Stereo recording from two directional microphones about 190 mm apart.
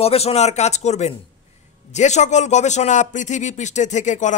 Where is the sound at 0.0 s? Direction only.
30° left (ahead or behind).